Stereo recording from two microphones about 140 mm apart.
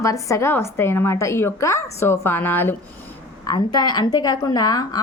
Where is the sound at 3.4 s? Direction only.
30° left (ahead or behind).